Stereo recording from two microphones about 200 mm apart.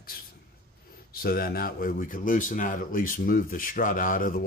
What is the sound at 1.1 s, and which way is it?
Speech, 50° left (ahead or behind).